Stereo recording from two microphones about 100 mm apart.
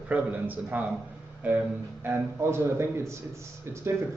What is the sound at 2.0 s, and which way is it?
Speech, 25° right (ahead or behind).